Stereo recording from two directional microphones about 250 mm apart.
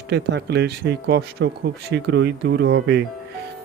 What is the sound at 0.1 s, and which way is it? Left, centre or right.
Speech, right.